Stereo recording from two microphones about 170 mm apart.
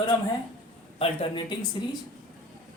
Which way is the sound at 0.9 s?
35° left (ahead or behind).